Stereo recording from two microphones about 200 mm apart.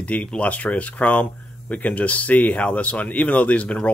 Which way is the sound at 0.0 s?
5° left (ahead or behind).